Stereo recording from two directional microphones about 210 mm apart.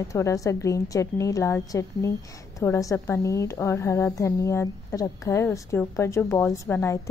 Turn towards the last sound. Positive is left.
turn(degrees=10)  # may be behind; listen again after turning